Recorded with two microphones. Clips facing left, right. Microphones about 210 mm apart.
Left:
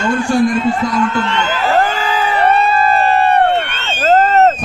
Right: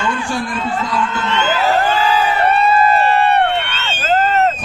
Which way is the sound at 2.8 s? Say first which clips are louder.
Left 1 dB; 40° left (ahead or behind).